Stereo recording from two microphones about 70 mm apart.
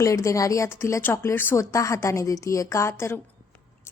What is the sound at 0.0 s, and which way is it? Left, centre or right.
A woman's voice, left.